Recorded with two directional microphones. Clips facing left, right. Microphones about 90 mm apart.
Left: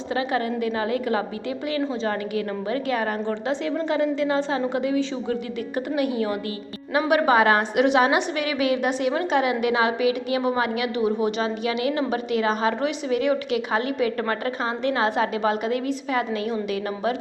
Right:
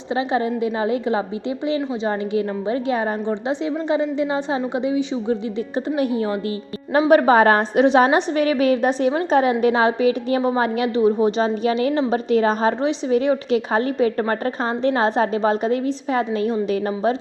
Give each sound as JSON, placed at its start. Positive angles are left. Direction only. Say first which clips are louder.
{"t": 0.1, "sound": "a woman's voice", "louder": "right 4 dB", "side_deg": -25}